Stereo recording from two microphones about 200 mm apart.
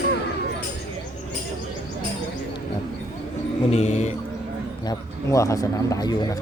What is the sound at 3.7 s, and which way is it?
Music, 35° left (ahead or behind).